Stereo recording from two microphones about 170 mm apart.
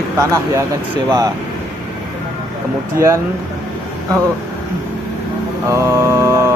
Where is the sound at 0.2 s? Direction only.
15° right (ahead or behind).